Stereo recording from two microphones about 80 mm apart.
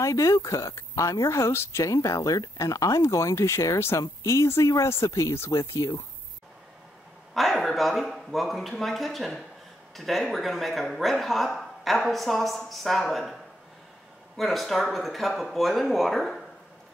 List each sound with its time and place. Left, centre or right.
0.0 s speech: left
7.3 s speech: centre